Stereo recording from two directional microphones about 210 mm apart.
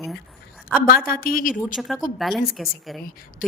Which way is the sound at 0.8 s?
45° left (ahead or behind).